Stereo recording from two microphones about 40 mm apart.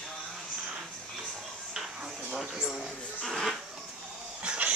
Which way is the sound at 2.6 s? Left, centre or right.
Centre.